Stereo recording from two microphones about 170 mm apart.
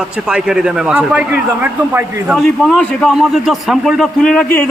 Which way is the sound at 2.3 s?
Centre (ahead or behind).